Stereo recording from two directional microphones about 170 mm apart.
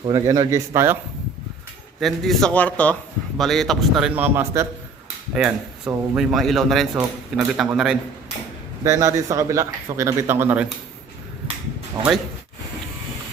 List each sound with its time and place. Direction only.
0.3 s a man's voice: 15° right (ahead or behind)
2.0 s a man's voice: centre (ahead or behind)
8.8 s a man's voice: 20° right (ahead or behind)